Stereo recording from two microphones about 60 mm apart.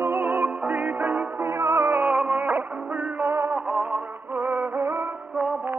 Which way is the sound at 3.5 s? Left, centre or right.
Right.